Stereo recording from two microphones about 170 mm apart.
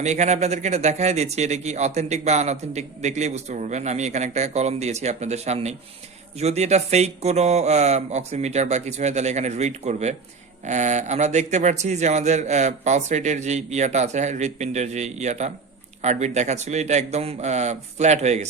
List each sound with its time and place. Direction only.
0.0 s a man's voice: 40° right (ahead or behind)